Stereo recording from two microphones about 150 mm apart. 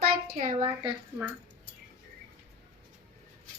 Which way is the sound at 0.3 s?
60° right (ahead or behind).